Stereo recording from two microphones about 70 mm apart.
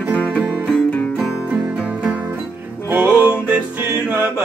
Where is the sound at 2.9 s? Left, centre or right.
Right.